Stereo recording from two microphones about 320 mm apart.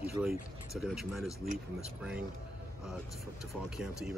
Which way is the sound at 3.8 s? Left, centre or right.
Centre.